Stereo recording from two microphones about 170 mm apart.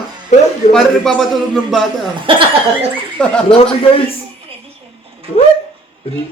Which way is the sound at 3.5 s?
35° left (ahead or behind).